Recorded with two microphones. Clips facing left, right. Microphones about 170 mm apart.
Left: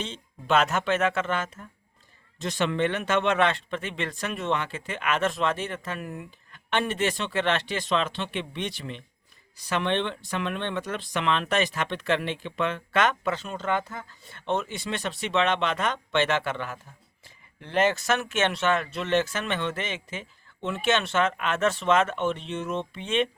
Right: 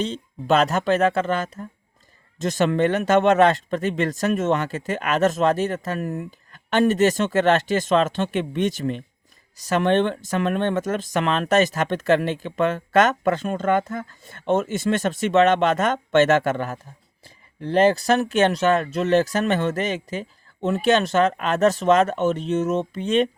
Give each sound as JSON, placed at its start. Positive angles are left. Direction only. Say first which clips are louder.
{"t": 0.0, "sound": "speech", "louder": "right 9 dB", "side_deg": -40}